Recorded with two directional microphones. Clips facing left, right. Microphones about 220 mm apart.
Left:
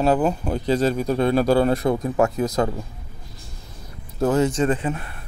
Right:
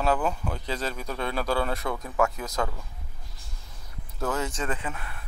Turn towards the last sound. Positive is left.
turn(degrees=35)  # may be behind; listen again after turning